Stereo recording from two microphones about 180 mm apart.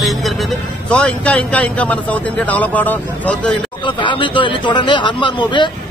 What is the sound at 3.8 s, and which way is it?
Speech, 25° left (ahead or behind).